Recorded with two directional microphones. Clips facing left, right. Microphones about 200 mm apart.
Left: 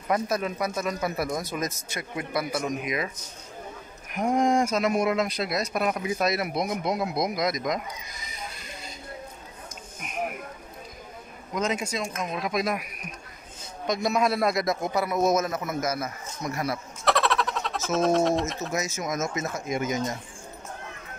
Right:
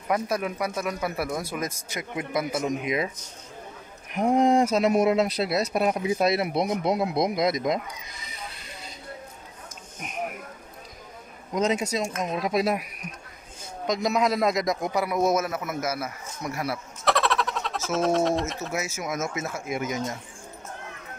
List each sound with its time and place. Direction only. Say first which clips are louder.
0.1 s a man's voice: even; 10° right (ahead or behind)
4.1 s speech: right 3 dB; 30° right (ahead or behind)
11.5 s speech: right 3 dB; 35° right (ahead or behind)
13.8 s a man's voice: right 1 dB; 15° right (ahead or behind)